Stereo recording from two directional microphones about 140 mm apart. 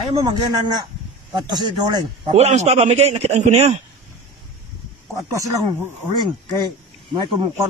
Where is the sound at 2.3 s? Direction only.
50° right (ahead or behind).